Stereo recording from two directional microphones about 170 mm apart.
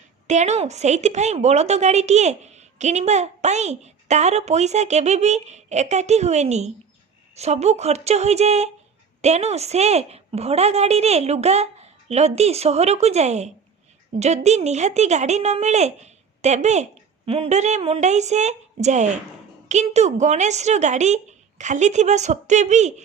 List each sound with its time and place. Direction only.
0.3 s a woman's voice: 40° right (ahead or behind)